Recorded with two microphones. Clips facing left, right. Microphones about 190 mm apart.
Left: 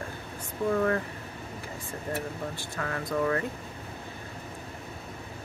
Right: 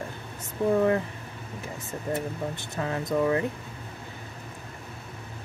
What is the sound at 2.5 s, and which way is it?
Speech, 20° right (ahead or behind).